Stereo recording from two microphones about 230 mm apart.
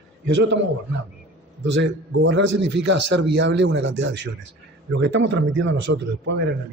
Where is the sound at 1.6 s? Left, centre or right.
Right.